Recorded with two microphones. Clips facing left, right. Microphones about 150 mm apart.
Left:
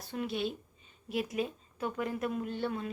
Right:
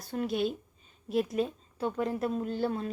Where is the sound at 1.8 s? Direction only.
30° right (ahead or behind).